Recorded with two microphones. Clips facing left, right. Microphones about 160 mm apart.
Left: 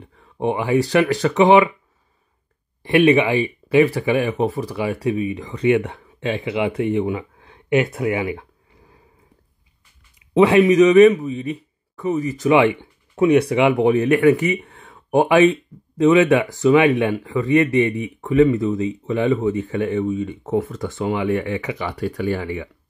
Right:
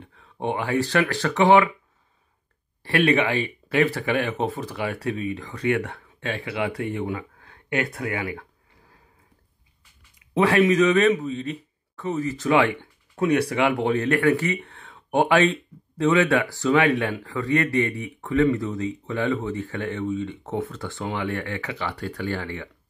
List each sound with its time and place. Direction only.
0.0 s speech: 15° left (ahead or behind)
2.8 s speech: 15° left (ahead or behind)
10.3 s speech: 20° left (ahead or behind)
14.6 s a sound: 5° left (ahead or behind)
16.0 s speech: 20° left (ahead or behind)